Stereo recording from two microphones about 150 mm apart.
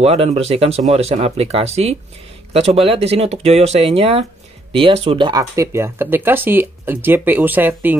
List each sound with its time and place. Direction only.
0.0 s speech: 45° right (ahead or behind); by 8.0 s 10° right (ahead or behind)